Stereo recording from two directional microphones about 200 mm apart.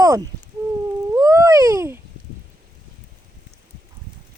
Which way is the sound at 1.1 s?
15° right (ahead or behind).